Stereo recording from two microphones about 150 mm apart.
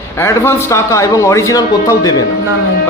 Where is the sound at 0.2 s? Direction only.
20° left (ahead or behind).